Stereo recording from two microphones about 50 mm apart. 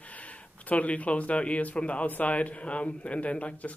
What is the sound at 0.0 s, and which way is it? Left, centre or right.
Speech, left.